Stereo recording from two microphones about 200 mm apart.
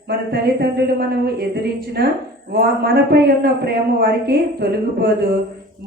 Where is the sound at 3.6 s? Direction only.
50° right (ahead or behind).